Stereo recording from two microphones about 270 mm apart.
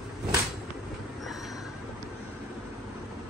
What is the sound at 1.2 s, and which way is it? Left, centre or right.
Train, centre.